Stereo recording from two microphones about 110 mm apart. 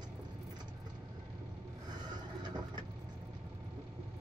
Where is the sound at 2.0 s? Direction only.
40° right (ahead or behind).